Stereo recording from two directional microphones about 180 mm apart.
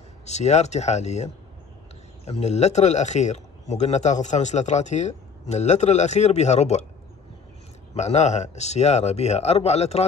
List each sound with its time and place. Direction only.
0.2 s a man's voice: 40° left (ahead or behind)
7.9 s a man's voice: 35° left (ahead or behind)